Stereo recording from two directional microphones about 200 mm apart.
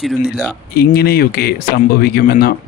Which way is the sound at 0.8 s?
50° left (ahead or behind).